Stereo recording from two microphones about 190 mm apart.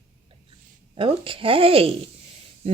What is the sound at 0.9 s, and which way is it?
Speech, 30° right (ahead or behind).